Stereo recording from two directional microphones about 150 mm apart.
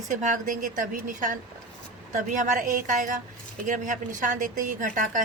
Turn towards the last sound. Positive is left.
turn(degrees=-60)  # may be behind; listen again after turning